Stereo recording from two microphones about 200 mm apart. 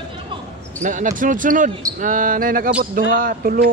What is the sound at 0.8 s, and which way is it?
Speech, 40° right (ahead or behind).